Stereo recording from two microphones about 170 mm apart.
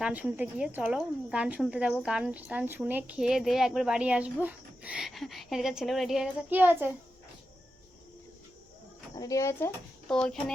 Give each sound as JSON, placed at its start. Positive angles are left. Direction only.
{"t": 0.0, "sound": "speech", "side_deg": -10}
{"t": 9.1, "sound": "speech", "side_deg": 20}
{"t": 10.1, "sound": "speech", "side_deg": 5}